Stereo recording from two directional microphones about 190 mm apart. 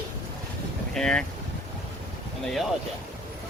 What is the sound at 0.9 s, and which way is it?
Speech, 5° left (ahead or behind).